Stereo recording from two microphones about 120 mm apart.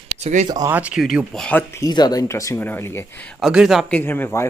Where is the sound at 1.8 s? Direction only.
35° left (ahead or behind); by 3.1 s 20° left (ahead or behind).